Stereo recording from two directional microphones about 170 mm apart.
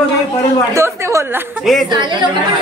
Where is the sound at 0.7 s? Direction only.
15° right (ahead or behind).